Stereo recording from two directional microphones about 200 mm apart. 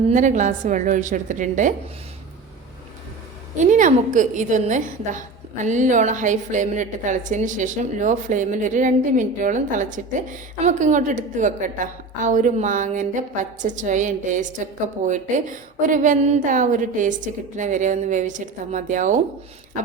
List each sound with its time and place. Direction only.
0.1 s a woman's voice: 40° right (ahead or behind)
3.6 s a woman's voice: 40° right (ahead or behind)